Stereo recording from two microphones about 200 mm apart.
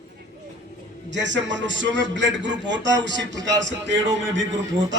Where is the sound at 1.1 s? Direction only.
65° right (ahead or behind).